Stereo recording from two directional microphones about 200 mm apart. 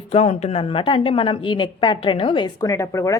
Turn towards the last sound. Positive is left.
turn(degrees=15)  # may be behind; listen again after turning